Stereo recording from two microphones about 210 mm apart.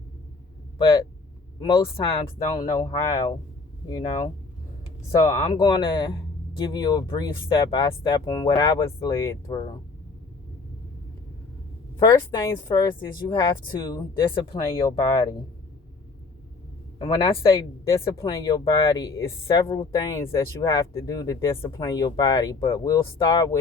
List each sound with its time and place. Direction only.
1.5 s speech: 20° left (ahead or behind)
11.9 s speech: 15° left (ahead or behind)
17.0 s speech: 25° left (ahead or behind)